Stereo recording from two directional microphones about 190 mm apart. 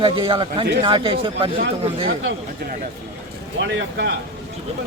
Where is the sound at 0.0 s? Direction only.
25° right (ahead or behind).